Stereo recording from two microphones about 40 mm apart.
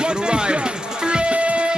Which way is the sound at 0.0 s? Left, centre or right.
Right.